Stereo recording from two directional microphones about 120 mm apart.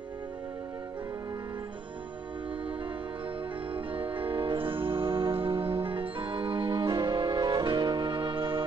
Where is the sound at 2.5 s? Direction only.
45° right (ahead or behind).